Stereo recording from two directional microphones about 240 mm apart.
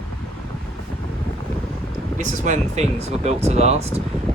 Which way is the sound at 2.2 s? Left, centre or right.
Right.